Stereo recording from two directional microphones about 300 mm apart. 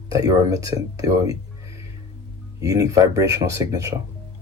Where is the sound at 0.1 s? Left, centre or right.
Centre.